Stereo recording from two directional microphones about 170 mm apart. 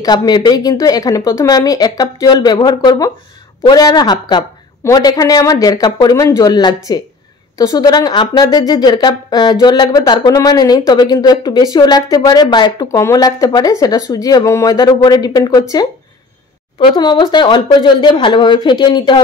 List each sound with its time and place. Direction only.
0.0 s speech: 25° left (ahead or behind)
16.8 s speech: 25° left (ahead or behind)